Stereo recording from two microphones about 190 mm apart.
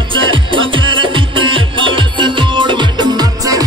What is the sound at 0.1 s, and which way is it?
Music, 25° right (ahead or behind).